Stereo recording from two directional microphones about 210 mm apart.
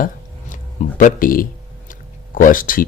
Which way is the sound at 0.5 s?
40° left (ahead or behind).